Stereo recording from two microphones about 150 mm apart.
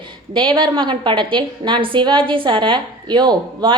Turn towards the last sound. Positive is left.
turn(degrees=-30)  # may be behind; listen again after turning